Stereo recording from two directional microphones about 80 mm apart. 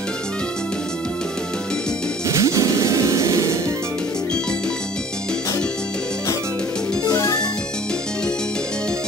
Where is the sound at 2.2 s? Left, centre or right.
Right.